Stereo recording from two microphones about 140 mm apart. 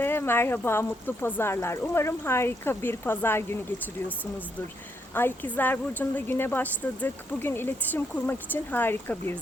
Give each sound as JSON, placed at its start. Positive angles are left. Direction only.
{"t": 0.0, "sound": "a woman's voice", "side_deg": 15}
{"t": 5.1, "sound": "a woman's voice", "side_deg": 15}